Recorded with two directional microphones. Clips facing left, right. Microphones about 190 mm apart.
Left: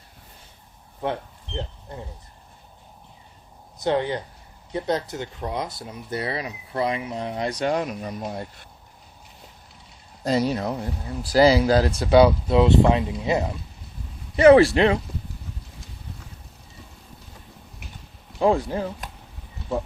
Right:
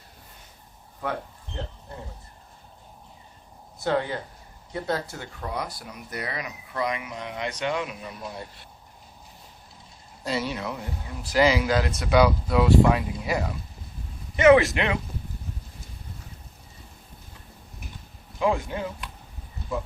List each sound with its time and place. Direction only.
3.8 s speech: 20° left (ahead or behind); by 8.4 s 45° left (ahead or behind)
10.2 s speech: 40° left (ahead or behind); by 13.5 s 25° left (ahead or behind)
14.3 s speech: 35° left (ahead or behind)
18.3 s speech: 35° left (ahead or behind)